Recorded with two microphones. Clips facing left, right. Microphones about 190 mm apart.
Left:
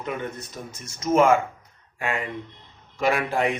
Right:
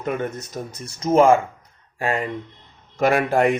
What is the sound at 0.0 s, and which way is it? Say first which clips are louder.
Speech: right 5 dB; 45° right (ahead or behind).